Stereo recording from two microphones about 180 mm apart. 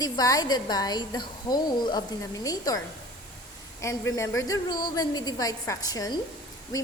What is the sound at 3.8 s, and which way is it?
A woman's voice, 15° left (ahead or behind).